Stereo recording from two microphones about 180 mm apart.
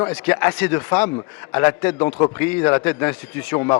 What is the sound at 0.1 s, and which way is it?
A man's voice, 10° left (ahead or behind).